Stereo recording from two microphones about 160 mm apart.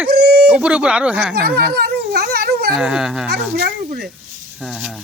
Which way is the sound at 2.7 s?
5° right (ahead or behind).